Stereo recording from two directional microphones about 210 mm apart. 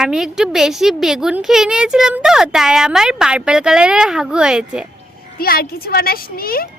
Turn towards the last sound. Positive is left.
turn(degrees=45)  # may be behind; listen again after turning